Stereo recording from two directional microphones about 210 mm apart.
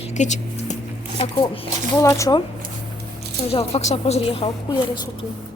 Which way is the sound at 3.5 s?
30° left (ahead or behind).